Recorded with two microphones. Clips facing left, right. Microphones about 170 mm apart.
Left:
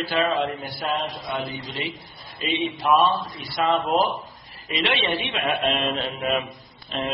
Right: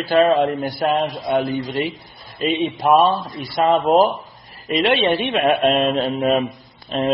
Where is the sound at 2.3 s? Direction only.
50° right (ahead or behind).